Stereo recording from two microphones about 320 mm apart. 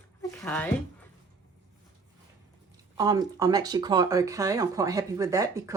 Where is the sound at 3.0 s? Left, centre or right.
Centre.